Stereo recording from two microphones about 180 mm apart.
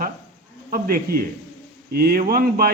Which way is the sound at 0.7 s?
55° right (ahead or behind).